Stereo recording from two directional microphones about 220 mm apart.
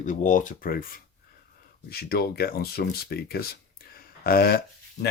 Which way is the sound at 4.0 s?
45° left (ahead or behind).